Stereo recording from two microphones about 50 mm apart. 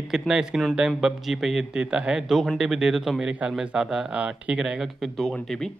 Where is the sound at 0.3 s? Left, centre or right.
Centre.